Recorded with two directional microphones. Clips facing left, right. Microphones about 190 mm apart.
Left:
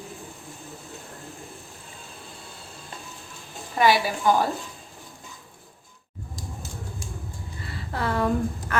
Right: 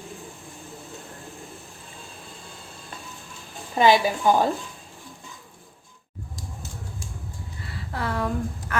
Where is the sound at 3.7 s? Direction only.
20° right (ahead or behind).